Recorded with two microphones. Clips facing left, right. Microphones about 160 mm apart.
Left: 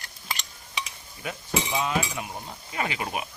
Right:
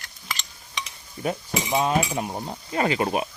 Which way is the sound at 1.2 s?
40° right (ahead or behind).